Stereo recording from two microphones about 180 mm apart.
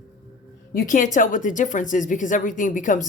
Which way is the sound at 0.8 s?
45° left (ahead or behind).